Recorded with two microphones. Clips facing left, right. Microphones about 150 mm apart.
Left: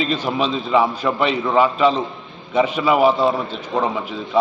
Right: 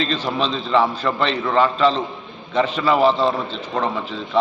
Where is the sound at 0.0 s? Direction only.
10° left (ahead or behind).